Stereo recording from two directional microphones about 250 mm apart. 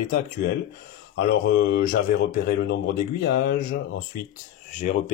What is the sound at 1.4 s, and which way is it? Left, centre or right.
Speech, left.